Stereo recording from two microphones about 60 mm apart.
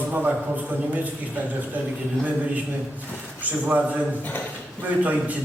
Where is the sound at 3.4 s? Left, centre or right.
Right.